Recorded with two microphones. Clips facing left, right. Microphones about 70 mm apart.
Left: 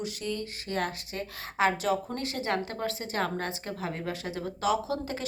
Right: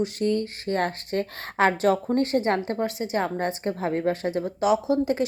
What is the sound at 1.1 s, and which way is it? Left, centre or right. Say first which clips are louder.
A woman's voice: right 8 dB; right.